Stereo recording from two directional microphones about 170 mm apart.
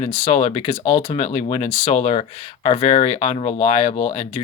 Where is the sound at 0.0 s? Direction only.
40° left (ahead or behind).